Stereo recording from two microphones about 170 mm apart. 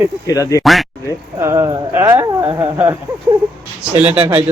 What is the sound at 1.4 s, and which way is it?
Speech, 15° right (ahead or behind).